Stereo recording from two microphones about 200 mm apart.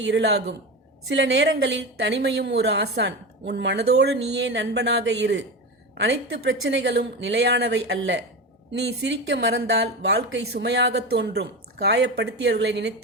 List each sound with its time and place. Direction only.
0.1 s speech: 60° right (ahead or behind)